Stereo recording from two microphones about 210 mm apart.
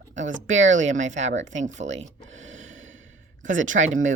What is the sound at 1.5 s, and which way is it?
Gasp, 35° right (ahead or behind).